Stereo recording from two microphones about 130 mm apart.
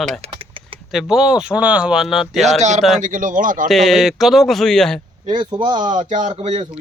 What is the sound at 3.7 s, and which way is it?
Speech, centre (ahead or behind).